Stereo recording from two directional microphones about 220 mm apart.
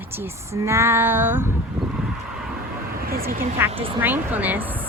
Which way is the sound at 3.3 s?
40° right (ahead or behind).